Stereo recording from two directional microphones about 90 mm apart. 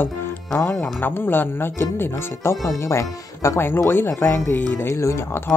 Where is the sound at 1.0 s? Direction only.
25° left (ahead or behind).